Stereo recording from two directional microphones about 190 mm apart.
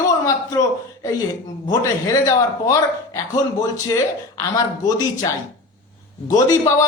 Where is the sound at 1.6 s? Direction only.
15° left (ahead or behind).